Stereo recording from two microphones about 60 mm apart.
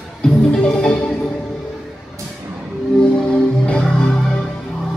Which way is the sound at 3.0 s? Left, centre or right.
Centre.